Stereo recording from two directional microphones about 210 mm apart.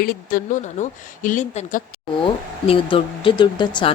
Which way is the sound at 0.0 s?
45° left (ahead or behind).